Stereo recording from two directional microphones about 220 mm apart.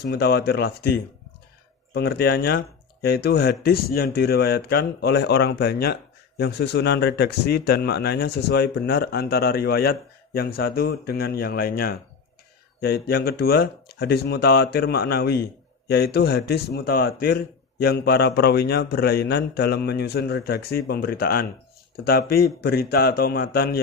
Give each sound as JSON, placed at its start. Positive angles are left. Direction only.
{"t": 0.0, "sound": "speech", "side_deg": 45}